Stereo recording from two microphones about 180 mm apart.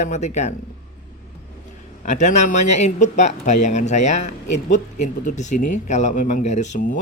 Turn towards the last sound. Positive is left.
turn(degrees=45)  # may be behind; listen again after turning